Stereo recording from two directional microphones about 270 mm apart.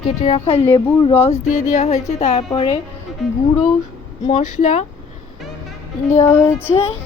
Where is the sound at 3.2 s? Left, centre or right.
Centre.